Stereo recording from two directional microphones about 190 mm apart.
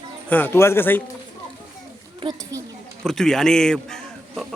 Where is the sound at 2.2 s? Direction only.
25° right (ahead or behind).